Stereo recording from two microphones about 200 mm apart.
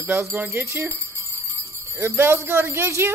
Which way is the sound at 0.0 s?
10° right (ahead or behind).